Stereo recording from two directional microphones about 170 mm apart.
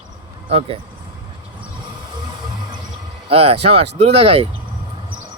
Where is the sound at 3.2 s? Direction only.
35° right (ahead or behind).